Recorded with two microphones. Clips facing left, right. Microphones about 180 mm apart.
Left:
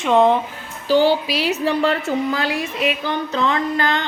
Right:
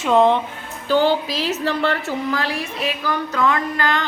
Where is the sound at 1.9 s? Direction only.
25° left (ahead or behind).